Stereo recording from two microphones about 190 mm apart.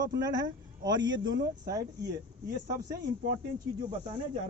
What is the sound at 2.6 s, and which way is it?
Speech, 20° right (ahead or behind).